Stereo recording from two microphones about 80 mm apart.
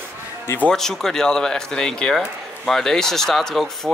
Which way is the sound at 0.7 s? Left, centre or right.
Centre.